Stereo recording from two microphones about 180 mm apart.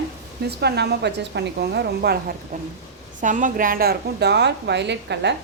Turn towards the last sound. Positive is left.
turn(degrees=-70)  # may be behind; listen again after turning